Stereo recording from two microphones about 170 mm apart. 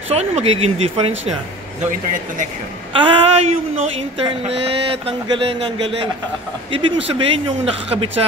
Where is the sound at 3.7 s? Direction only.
35° right (ahead or behind).